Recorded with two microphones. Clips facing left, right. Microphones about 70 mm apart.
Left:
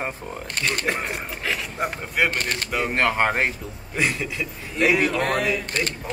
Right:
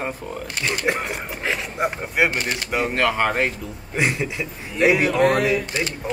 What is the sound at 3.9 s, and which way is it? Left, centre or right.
Speech, right.